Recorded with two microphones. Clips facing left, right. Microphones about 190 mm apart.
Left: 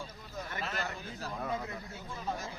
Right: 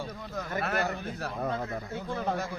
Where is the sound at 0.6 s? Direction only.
65° right (ahead or behind).